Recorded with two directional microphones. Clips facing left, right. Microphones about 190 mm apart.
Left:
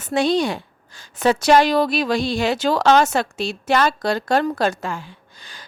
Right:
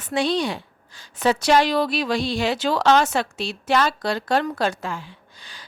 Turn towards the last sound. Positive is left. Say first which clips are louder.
# left 2 dB
turn(degrees=45)  # may be behind; listen again after turning